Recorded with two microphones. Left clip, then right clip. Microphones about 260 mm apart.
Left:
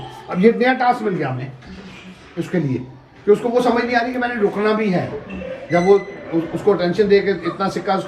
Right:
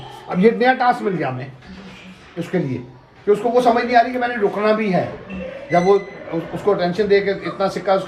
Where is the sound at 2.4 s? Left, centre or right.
Right.